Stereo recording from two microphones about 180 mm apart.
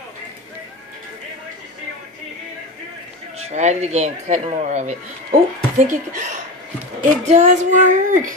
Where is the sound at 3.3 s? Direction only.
40° right (ahead or behind).